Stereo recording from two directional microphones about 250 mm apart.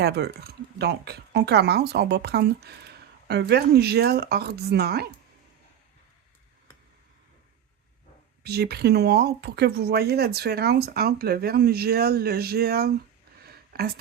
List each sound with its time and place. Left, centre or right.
0.0 s speech: right
8.4 s speech: right
13.4 s a sound: right